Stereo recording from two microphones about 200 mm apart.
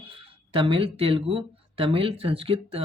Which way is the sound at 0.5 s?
25° right (ahead or behind).